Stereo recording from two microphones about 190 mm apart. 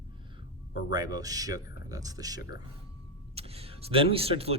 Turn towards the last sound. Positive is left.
turn(degrees=-30)  # may be behind; listen again after turning